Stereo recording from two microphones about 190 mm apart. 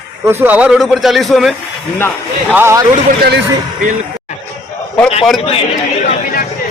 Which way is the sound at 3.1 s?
55° right (ahead or behind).